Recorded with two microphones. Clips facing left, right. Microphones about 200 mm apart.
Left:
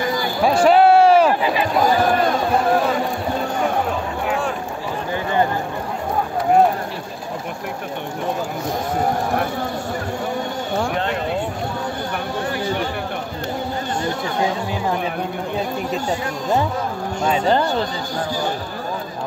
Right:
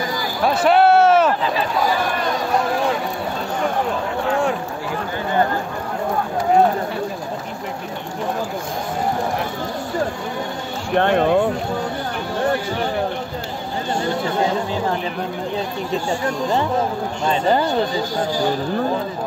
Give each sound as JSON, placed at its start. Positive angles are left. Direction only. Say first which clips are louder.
{"t": 0.6, "sound": "a sound", "louder": "left 1 dB", "side_deg": 0}
{"t": 1.2, "sound": "run", "louder": "left 2 dB", "side_deg": 10}
{"t": 11.0, "sound": "speech", "louder": "right 7 dB", "side_deg": -60}
{"t": 17.5, "sound": "speech", "louder": "right 2 dB", "side_deg": -10}